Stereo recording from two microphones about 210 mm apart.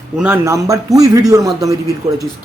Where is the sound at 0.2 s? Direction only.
10° right (ahead or behind).